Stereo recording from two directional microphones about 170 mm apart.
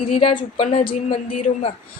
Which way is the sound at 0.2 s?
35° left (ahead or behind).